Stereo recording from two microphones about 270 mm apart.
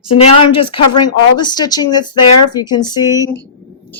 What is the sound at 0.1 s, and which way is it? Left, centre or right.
Speech, centre.